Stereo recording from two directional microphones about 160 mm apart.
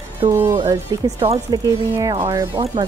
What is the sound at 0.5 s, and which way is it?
Speech, 30° right (ahead or behind).